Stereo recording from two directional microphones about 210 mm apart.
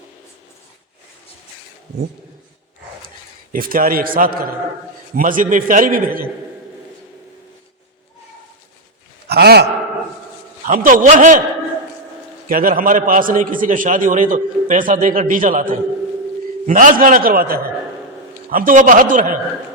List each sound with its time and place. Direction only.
3.5 s a man's voice: 40° right (ahead or behind)
9.3 s a man's voice: 50° right (ahead or behind)
10.7 s a man's voice: 40° right (ahead or behind)
12.5 s a man's voice: 40° right (ahead or behind)
16.6 s a man's voice: 40° right (ahead or behind)